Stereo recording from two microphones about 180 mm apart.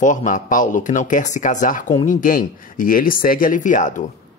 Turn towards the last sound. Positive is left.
turn(degrees=45)  # may be behind; listen again after turning